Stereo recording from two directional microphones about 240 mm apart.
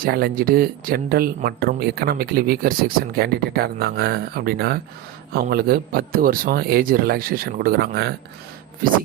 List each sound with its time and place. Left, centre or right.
0.0 s a man's voice: right